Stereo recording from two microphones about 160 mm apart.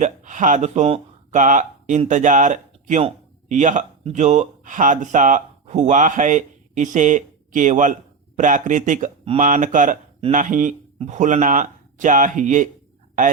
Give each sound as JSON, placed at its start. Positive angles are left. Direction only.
{"t": 0.0, "sound": "speech", "side_deg": -50}